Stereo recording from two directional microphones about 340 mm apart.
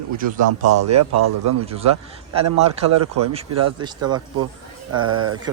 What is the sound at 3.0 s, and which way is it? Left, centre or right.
Speech, right.